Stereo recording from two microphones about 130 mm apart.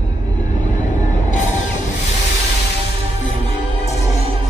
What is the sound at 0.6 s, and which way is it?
Vehicle, 70° left (ahead or behind).